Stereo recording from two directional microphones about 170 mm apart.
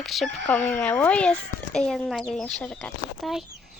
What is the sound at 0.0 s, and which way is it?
Speech, centre (ahead or behind).